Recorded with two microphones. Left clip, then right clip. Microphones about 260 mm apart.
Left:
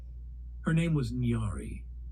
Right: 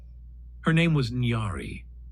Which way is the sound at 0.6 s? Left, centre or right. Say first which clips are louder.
Right 8 dB; right.